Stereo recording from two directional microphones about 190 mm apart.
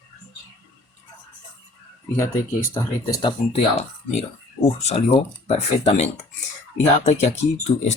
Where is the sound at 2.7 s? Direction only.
25° left (ahead or behind).